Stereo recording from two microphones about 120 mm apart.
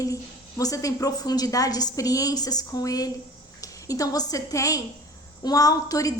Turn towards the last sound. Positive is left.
turn(degrees=30)  # may be behind; listen again after turning